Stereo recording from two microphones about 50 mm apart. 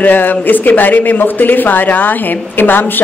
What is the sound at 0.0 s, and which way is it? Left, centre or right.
Speech, left.